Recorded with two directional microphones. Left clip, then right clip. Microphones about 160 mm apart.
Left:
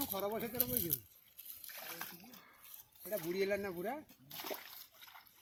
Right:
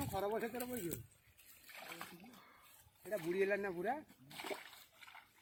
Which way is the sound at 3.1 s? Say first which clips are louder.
Even; 75° left (ahead or behind).